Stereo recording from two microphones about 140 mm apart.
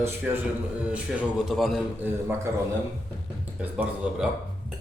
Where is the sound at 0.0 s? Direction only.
10° right (ahead or behind).